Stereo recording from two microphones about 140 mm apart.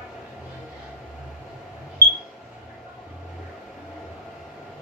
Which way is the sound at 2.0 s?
15° left (ahead or behind).